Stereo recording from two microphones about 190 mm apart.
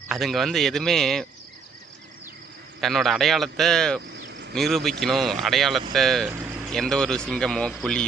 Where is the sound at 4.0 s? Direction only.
60° right (ahead or behind).